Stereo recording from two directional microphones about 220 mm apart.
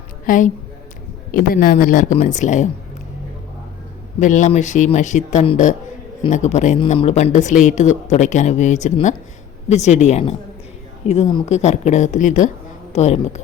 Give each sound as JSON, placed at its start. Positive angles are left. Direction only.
{"t": 0.3, "sound": "speech", "side_deg": 35}
{"t": 4.2, "sound": "speech", "side_deg": 35}